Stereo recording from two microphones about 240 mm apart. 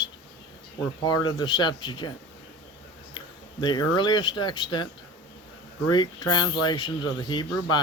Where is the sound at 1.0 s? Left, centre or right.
Centre.